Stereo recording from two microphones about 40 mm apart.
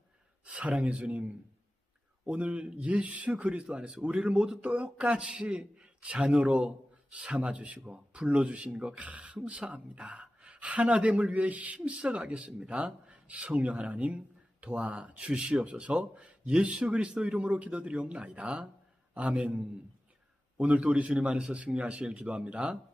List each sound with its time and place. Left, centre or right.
0.4 s a woman's voice: right
15.4 s a man's voice: right